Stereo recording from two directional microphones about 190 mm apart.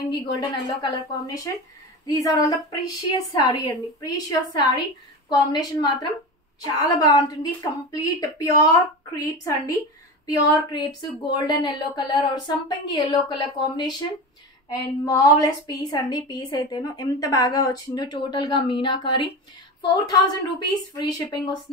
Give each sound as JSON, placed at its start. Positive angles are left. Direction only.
{"t": 0.4, "sound": "a woman's voice", "side_deg": 20}
{"t": 5.3, "sound": "a woman's voice", "side_deg": 20}